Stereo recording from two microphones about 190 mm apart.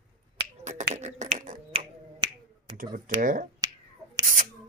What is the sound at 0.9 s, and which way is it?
Finger snapping, 40° right (ahead or behind).